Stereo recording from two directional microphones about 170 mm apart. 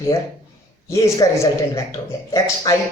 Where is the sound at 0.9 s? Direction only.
15° left (ahead or behind).